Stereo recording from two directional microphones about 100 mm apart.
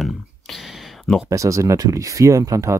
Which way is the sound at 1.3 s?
35° right (ahead or behind).